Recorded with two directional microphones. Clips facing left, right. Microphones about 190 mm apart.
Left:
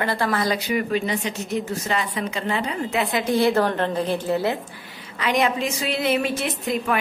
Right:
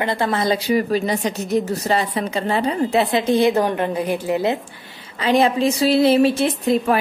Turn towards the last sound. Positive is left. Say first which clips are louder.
# right 6 dB
turn(degrees=-30)  # may be behind; listen again after turning